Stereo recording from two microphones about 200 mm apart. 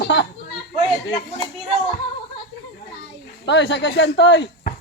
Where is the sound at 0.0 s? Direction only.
60° left (ahead or behind).